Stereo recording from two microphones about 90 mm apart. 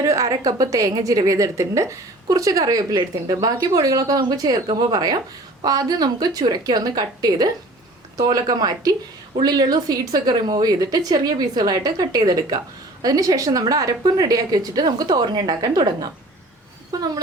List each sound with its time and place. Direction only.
0.0 s a woman's voice: 35° right (ahead or behind)